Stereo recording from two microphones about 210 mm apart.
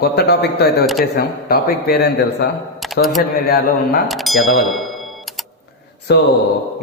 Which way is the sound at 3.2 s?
45° left (ahead or behind).